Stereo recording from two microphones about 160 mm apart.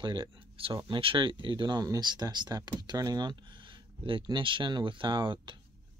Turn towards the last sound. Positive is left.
turn(degrees=-30)  # may be behind; listen again after turning